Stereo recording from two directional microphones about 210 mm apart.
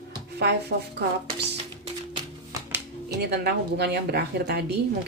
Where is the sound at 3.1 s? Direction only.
50° right (ahead or behind).